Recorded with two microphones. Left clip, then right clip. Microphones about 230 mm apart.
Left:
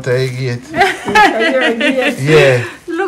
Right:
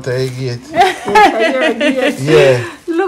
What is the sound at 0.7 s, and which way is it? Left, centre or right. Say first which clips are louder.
A woman's voice: right 1 dB; right.